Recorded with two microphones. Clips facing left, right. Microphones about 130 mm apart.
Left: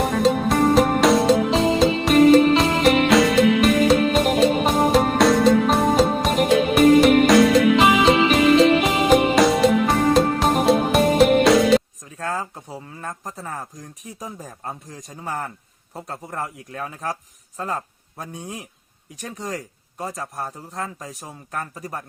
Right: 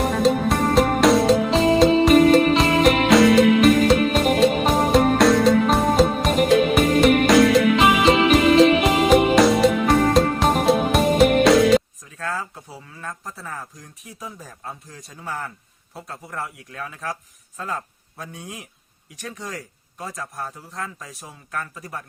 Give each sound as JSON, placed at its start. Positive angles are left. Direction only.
{"t": 0.0, "sound": "music", "side_deg": 0}
{"t": 12.1, "sound": "a sound", "side_deg": 35}
{"t": 14.2, "sound": "speech", "side_deg": 40}